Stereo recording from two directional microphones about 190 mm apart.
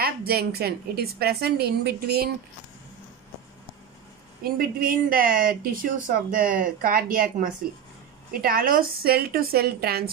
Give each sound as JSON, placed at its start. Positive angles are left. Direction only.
{"t": 0.0, "sound": "a woman's voice", "side_deg": -55}
{"t": 4.4, "sound": "speech", "side_deg": -50}